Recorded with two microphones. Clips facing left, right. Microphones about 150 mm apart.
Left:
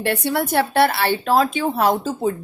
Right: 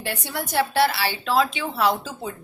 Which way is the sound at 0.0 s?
65° left (ahead or behind).